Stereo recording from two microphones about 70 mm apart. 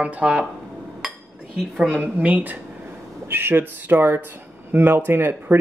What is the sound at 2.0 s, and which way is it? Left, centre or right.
Speech, right.